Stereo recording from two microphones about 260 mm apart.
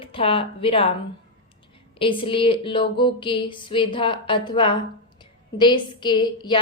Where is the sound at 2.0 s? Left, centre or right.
Centre.